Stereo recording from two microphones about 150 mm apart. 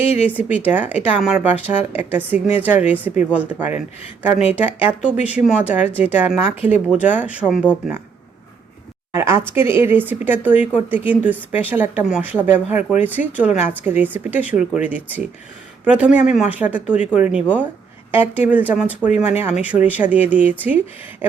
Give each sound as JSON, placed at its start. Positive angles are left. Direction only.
{"t": 0.5, "sound": "a woman's voice", "side_deg": -10}
{"t": 9.1, "sound": "a woman's voice", "side_deg": -15}
{"t": 21.2, "sound": "a sound", "side_deg": -15}